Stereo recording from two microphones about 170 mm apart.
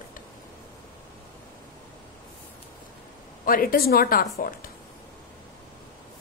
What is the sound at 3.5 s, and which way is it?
A woman's voice, 60° left (ahead or behind).